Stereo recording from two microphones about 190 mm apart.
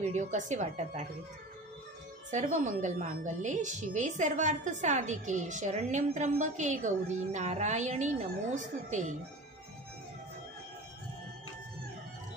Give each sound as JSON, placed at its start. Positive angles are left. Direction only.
{"t": 0.0, "sound": "a woman's voice", "side_deg": -40}
{"t": 2.3, "sound": "a woman's voice", "side_deg": -40}